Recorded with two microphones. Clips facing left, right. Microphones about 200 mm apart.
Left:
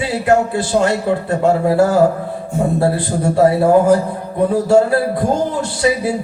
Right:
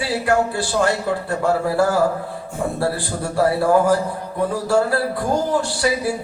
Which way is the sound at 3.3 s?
20° left (ahead or behind).